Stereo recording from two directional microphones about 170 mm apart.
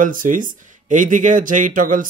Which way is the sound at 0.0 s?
50° right (ahead or behind).